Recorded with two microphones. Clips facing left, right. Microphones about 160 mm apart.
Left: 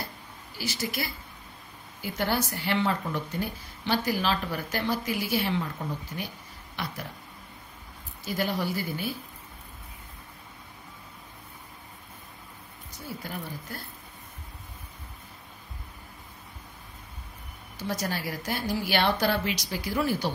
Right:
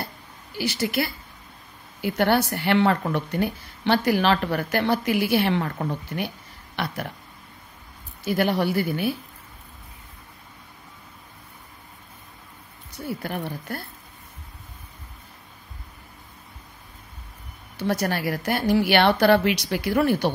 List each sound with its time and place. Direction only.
0.6 s speech: 65° right (ahead or behind)
8.3 s speech: 65° right (ahead or behind)
12.9 s speech: 65° right (ahead or behind)
17.7 s speech: 65° right (ahead or behind)